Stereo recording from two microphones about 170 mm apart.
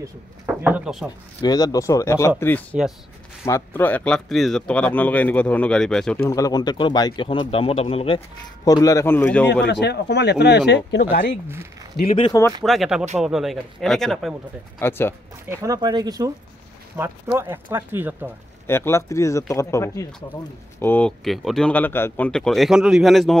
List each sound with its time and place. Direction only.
0.6 s speech: 10° right (ahead or behind)
1.4 s speech: 20° left (ahead or behind); by 6.2 s 5° left (ahead or behind)
6.2 s speech: 20° left (ahead or behind); by 8.2 s 35° left (ahead or behind)
8.6 s speech: 20° left (ahead or behind)
9.7 s speech: 80° left
10.7 s speech: 90° left
12.3 s speech: 15° left (ahead or behind)
12.6 s speech: centre (ahead or behind)
14.8 s speech: 15° left (ahead or behind)
15.4 s speech: 15° right (ahead or behind)
18.7 s speech: 15° left (ahead or behind)
21.2 s speech: centre (ahead or behind)